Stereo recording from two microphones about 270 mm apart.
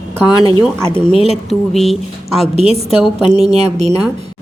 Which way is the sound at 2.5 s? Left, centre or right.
Right.